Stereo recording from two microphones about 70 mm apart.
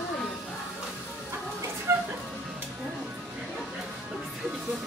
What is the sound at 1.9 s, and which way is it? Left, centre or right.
Music, right.